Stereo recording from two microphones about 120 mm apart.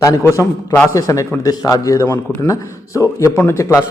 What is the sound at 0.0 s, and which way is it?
A man's voice, 25° left (ahead or behind).